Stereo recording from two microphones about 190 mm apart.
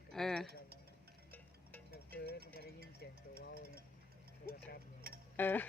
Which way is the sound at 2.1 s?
55° left (ahead or behind).